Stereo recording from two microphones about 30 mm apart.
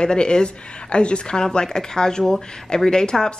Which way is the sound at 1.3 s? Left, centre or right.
Left.